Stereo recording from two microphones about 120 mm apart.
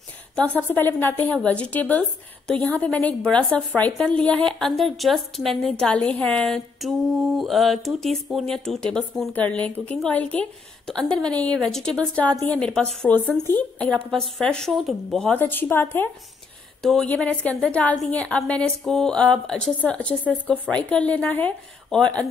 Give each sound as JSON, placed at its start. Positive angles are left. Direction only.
{"t": 0.4, "sound": "a woman's voice", "side_deg": 15}
{"t": 15.3, "sound": "a woman's voice", "side_deg": 15}
{"t": 16.8, "sound": "a woman's voice", "side_deg": 5}